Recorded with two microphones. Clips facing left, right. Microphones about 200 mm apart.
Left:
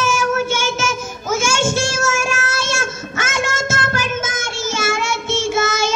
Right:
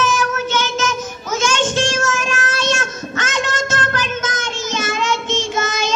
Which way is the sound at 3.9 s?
10° left (ahead or behind).